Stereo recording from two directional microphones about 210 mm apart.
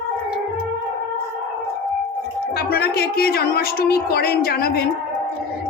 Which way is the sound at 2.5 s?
50° left (ahead or behind).